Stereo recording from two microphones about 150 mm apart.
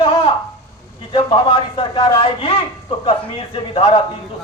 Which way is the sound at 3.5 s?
40° left (ahead or behind).